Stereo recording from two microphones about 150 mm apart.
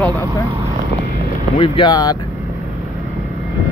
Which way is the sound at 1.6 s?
30° left (ahead or behind).